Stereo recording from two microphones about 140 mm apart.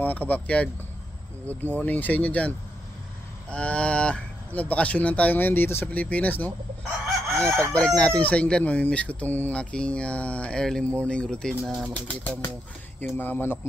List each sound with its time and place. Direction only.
0.0 s speech: 10° left (ahead or behind)
1.8 s speech: 10° left (ahead or behind)
3.5 s speech: 10° left (ahead or behind)
11.9 s speech: 10° left (ahead or behind)